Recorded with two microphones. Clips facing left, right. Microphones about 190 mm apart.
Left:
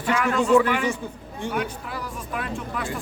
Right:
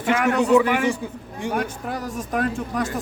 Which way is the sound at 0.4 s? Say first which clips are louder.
Right 1 dB; 20° right (ahead or behind).